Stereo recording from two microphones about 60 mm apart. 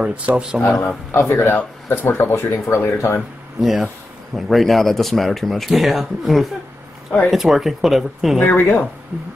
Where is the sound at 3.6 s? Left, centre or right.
Centre.